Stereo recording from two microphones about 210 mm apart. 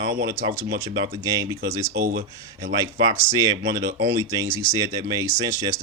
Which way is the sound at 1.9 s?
50° right (ahead or behind).